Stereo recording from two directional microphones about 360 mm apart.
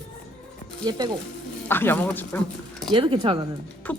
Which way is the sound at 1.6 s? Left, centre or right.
Centre.